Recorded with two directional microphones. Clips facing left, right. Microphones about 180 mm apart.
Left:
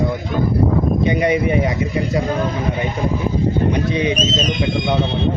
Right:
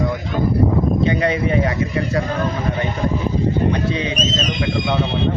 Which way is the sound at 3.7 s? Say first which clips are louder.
Left 3 dB; 15° left (ahead or behind).